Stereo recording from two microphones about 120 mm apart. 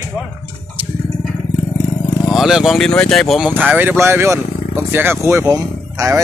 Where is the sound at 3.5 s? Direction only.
15° right (ahead or behind).